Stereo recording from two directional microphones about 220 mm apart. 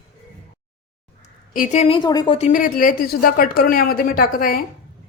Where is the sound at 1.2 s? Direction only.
35° left (ahead or behind); by 2.3 s 20° left (ahead or behind).